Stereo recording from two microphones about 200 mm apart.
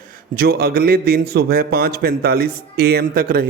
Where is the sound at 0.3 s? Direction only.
50° right (ahead or behind).